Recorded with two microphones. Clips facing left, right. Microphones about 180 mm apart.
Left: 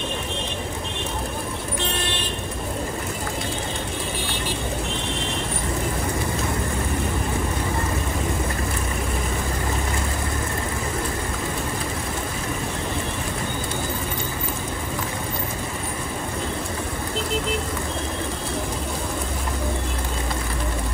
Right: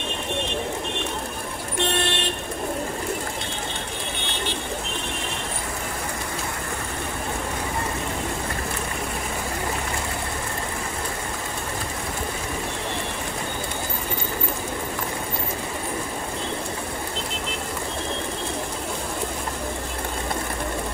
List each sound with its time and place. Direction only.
1.8 s vehicle: 60° right (ahead or behind)